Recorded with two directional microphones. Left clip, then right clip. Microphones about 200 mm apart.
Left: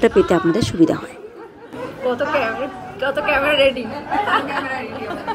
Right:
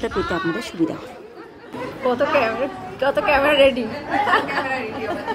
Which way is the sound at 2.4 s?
50° right (ahead or behind).